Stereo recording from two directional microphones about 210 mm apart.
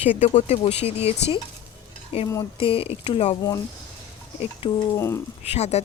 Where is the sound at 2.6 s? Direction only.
25° left (ahead or behind).